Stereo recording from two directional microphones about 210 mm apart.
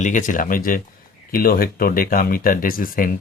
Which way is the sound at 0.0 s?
40° left (ahead or behind).